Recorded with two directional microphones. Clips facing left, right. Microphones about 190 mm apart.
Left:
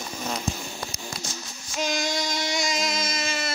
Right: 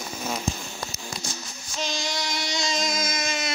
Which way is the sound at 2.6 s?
5° left (ahead or behind).